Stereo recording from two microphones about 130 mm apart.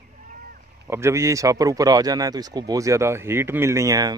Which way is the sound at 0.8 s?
20° right (ahead or behind).